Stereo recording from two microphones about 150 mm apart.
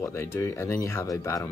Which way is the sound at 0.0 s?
15° left (ahead or behind).